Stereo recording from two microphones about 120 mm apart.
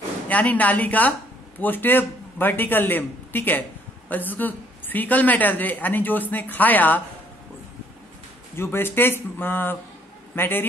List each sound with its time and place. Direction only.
0.3 s a woman's voice: 10° left (ahead or behind)
8.5 s a woman's voice: 20° left (ahead or behind)